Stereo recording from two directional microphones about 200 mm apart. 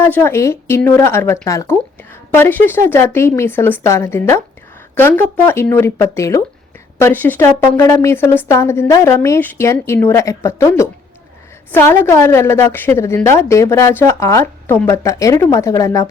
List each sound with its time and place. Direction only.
0.0 s a woman's voice: 10° left (ahead or behind)